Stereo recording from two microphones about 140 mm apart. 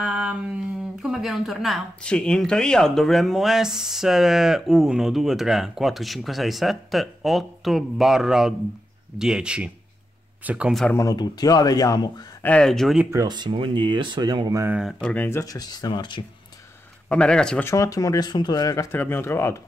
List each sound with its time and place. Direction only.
0.0 s a sound: 5° right (ahead or behind)
1.0 s speech: centre (ahead or behind)
10.9 s speech: 25° left (ahead or behind)
12.4 s speech: 5° left (ahead or behind)
13.0 s speech: 20° right (ahead or behind)
14.7 s speech: 5° right (ahead or behind)
15.0 s speech: 10° left (ahead or behind); by 16.2 s 35° left (ahead or behind)
17.1 s speech: 5° left (ahead or behind)
17.6 s speech: 25° left (ahead or behind)
18.9 s speech: 15° left (ahead or behind)